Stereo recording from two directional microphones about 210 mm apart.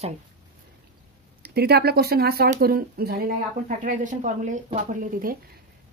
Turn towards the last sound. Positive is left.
turn(degrees=-40)  # may be behind; listen again after turning